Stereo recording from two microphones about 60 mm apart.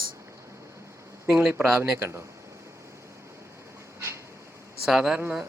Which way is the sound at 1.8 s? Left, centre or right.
Right.